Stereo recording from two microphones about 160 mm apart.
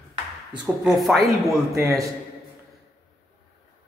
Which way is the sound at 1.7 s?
20° right (ahead or behind).